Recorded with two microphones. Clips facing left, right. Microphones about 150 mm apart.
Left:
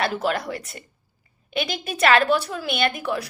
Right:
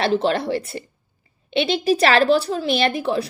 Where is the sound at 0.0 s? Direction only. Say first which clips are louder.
Right 5 dB; 30° right (ahead or behind).